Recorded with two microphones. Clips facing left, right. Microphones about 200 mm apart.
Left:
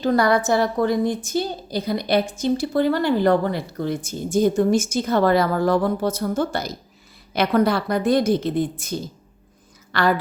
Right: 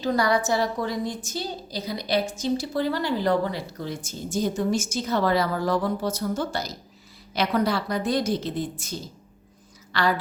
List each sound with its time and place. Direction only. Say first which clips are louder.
0.0 s a woman's voice: left 4 dB; 55° left (ahead or behind)